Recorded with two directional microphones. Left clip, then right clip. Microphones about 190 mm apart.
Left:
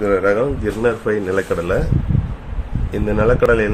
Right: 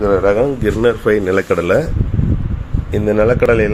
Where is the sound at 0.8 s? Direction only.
30° right (ahead or behind).